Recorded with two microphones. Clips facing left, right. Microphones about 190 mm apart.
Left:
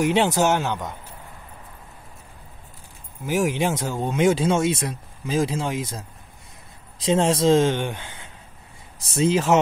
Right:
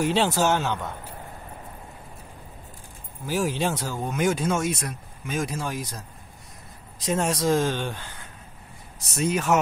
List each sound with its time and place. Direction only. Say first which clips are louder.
0.0 s speech: left 3 dB; 15° left (ahead or behind)
3.3 s speech: left 3 dB; 15° left (ahead or behind)